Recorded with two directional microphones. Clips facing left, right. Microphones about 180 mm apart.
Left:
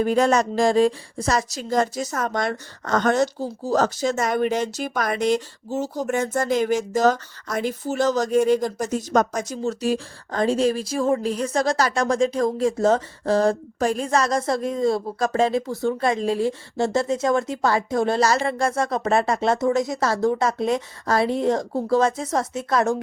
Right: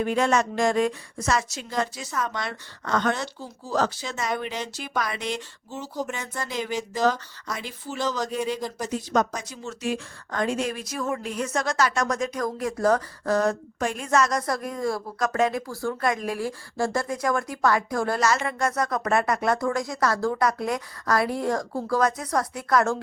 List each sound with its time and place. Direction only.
0.0 s a woman's voice: 40° left (ahead or behind); by 18.2 s 25° left (ahead or behind)
18.2 s speech: 35° left (ahead or behind)